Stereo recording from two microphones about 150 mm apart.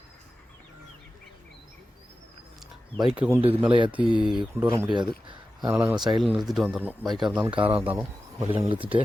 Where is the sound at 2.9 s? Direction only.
5° right (ahead or behind).